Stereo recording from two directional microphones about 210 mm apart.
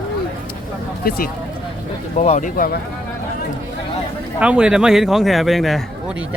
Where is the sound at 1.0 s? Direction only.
45° left (ahead or behind).